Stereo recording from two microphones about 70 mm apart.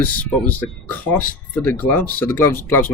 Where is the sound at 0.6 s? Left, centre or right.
Left.